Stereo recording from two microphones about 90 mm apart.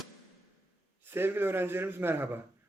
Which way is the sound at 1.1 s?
25° right (ahead or behind).